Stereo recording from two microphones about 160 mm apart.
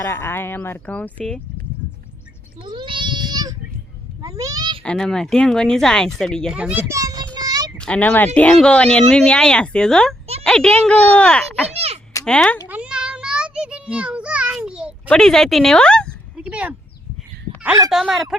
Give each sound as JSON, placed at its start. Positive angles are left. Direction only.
{"t": 0.1, "sound": "speech", "side_deg": 15}
{"t": 2.6, "sound": "goat", "side_deg": -30}
{"t": 4.2, "sound": "a sound", "side_deg": -20}
{"t": 4.8, "sound": "speech", "side_deg": 5}
{"t": 7.3, "sound": "child singing", "side_deg": -25}
{"t": 7.8, "sound": "speech", "side_deg": 10}
{"t": 11.7, "sound": "a sound", "side_deg": -40}
{"t": 12.2, "sound": "speech", "side_deg": 5}
{"t": 12.6, "sound": "a sound", "side_deg": -10}
{"t": 15.1, "sound": "speech", "side_deg": 5}
{"t": 16.4, "sound": "a sound", "side_deg": -10}
{"t": 17.9, "sound": "speech", "side_deg": 0}